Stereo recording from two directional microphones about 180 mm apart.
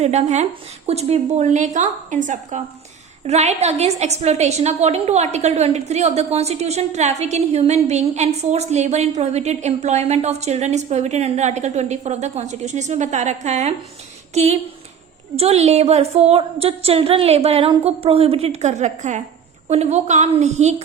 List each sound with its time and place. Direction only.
0.0 s a woman's voice: 35° right (ahead or behind)